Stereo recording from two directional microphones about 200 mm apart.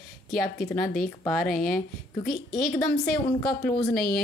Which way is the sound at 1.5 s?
45° left (ahead or behind).